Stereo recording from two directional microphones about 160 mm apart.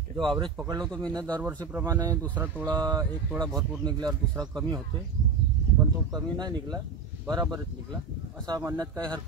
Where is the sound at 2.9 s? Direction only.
25° right (ahead or behind).